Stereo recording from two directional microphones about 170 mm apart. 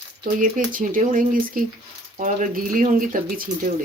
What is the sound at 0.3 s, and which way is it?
Speech, 50° right (ahead or behind).